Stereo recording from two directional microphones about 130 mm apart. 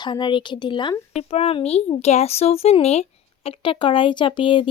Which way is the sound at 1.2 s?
50° left (ahead or behind).